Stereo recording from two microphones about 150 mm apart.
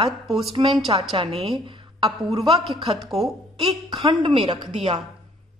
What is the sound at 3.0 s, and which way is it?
Speech, centre (ahead or behind).